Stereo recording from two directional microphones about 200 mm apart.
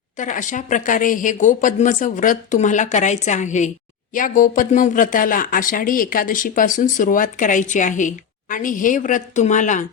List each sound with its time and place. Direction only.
0.2 s speech: 40° left (ahead or behind)